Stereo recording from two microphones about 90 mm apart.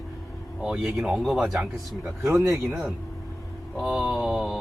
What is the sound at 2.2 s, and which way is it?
Speech, 30° right (ahead or behind).